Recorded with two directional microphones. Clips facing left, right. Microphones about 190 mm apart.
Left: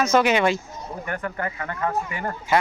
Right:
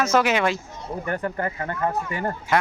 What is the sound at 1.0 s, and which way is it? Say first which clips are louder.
Speech: right 3 dB; 30° right (ahead or behind).